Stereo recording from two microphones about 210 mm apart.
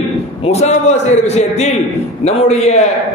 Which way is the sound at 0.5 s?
30° left (ahead or behind).